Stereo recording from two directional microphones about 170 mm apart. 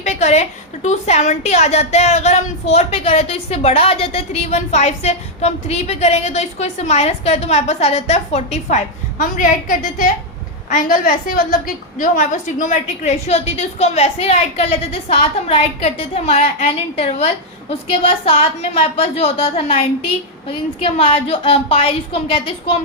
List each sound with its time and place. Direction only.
0.0 s a woman's voice: 40° left (ahead or behind)